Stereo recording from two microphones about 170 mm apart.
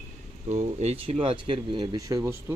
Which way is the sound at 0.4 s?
40° right (ahead or behind).